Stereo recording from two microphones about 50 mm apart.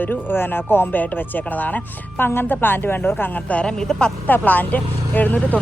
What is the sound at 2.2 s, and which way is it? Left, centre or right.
Speech, left.